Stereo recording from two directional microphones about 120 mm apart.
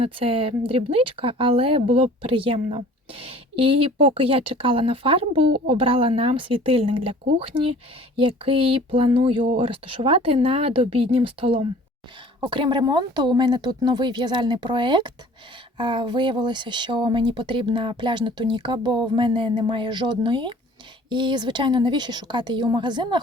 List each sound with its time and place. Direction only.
0.0 s speech: 50° right (ahead or behind)